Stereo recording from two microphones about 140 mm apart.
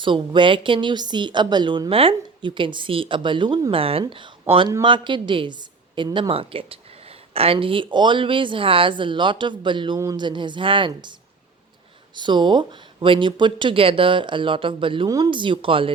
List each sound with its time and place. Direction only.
0.0 s speech: 35° right (ahead or behind)
12.1 s speech: 35° right (ahead or behind)